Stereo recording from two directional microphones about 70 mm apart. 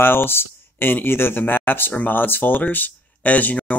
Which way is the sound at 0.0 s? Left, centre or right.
Left.